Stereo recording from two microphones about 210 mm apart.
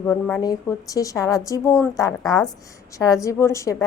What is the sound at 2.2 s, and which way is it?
Speech, centre (ahead or behind).